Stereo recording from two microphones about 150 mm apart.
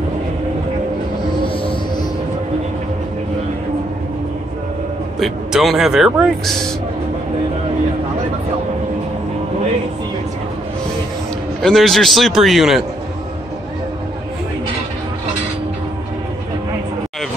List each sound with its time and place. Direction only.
1.4 s music: 35° left (ahead or behind)
5.2 s speech: centre (ahead or behind)
11.6 s speech: centre (ahead or behind)